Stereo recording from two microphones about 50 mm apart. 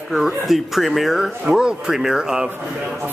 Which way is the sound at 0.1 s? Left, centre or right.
Centre.